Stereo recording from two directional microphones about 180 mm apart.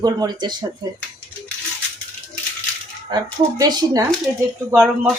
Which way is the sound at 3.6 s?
20° right (ahead or behind).